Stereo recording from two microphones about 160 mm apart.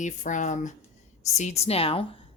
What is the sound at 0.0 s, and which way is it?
A woman's voice, 50° left (ahead or behind).